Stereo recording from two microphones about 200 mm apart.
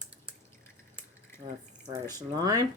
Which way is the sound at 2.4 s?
20° right (ahead or behind).